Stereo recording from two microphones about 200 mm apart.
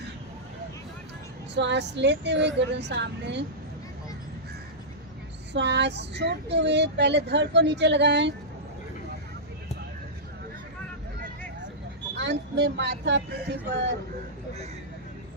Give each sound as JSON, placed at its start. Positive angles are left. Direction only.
{"t": 1.5, "sound": "speech", "side_deg": -60}
{"t": 5.5, "sound": "speech", "side_deg": -60}
{"t": 12.1, "sound": "speech", "side_deg": -60}